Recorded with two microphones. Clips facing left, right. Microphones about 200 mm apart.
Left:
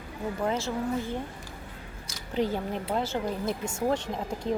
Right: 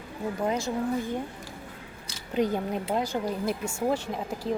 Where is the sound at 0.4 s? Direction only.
15° right (ahead or behind).